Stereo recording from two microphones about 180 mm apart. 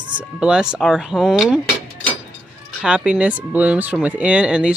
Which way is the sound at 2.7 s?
5° right (ahead or behind).